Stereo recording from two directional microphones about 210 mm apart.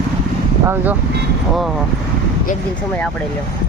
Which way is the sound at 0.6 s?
10° right (ahead or behind).